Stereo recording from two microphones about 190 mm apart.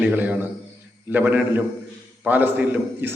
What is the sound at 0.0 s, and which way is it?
A man's voice, 10° right (ahead or behind).